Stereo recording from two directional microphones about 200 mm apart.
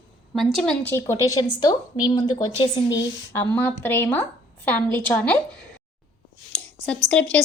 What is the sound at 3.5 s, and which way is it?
A woman's voice, 10° left (ahead or behind).